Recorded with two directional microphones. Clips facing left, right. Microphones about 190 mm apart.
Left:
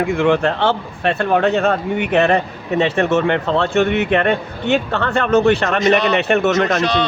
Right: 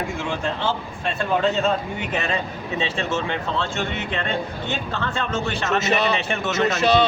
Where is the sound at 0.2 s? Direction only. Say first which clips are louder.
Left 10 dB; 65° left (ahead or behind).